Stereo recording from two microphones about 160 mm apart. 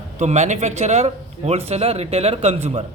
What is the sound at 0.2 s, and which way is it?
A man's voice, 45° right (ahead or behind).